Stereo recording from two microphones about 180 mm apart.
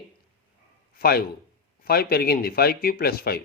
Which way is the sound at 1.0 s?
55° left (ahead or behind).